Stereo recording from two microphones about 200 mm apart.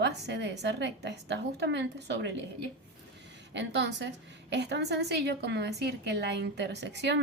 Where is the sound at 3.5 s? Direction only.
60° right (ahead or behind).